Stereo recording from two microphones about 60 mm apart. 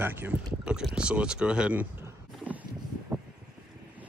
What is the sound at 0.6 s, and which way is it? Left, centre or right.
Speech, centre.